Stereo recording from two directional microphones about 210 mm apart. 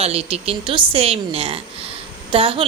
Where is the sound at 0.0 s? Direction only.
30° right (ahead or behind).